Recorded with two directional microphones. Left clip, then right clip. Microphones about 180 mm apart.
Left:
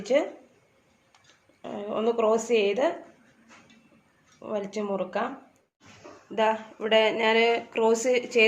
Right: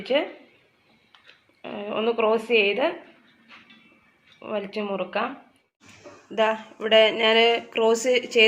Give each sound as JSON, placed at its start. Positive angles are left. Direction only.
{"t": 0.0, "sound": "a woman's voice", "side_deg": 10}
{"t": 1.6, "sound": "a woman's voice", "side_deg": 5}
{"t": 4.4, "sound": "speech", "side_deg": 5}
{"t": 6.3, "sound": "speech", "side_deg": 0}